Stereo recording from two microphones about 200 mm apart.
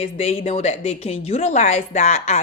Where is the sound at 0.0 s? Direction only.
30° left (ahead or behind).